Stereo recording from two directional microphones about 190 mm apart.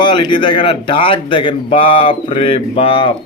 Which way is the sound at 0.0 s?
25° left (ahead or behind).